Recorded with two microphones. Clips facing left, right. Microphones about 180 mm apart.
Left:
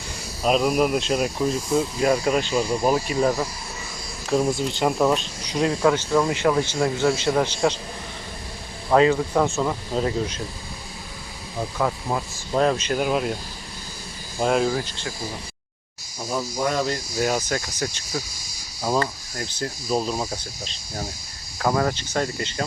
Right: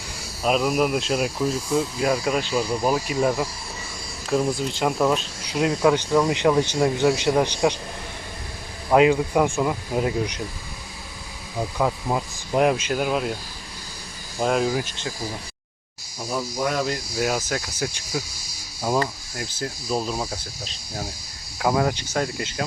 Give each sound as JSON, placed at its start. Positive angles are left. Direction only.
{"t": 0.4, "sound": "speech", "side_deg": 0}
{"t": 5.5, "sound": "speech", "side_deg": -5}
{"t": 8.9, "sound": "speech", "side_deg": -10}
{"t": 11.8, "sound": "speech", "side_deg": -10}
{"t": 14.3, "sound": "speech", "side_deg": 0}
{"t": 14.7, "sound": "speech", "side_deg": -15}
{"t": 16.2, "sound": "speech", "side_deg": 0}